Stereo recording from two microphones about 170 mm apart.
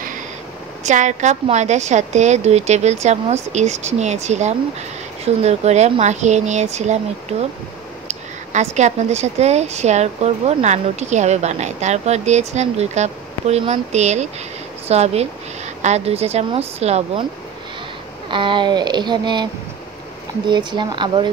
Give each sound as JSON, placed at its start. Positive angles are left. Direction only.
{"t": 0.8, "sound": "a woman's voice", "side_deg": -45}
{"t": 8.5, "sound": "a woman's voice", "side_deg": -45}
{"t": 18.3, "sound": "speech", "side_deg": -30}
{"t": 20.4, "sound": "speech", "side_deg": -25}